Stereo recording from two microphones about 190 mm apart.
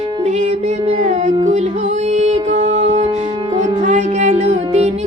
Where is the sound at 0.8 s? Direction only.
35° right (ahead or behind).